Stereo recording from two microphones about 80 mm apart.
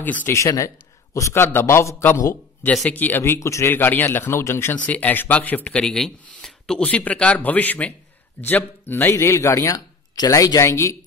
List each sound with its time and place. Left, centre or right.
0.0 s speech: left
0.3 s speech: left
1.4 s speech: left
2.9 s speech: left
3.3 s speech: left
3.7 s speech: left
4.7 s speech: centre
5.8 s speech: centre; by 9.1 s left
9.1 s speech: left
9.8 s a sound: left
10.3 s speech: left
10.6 s speech: left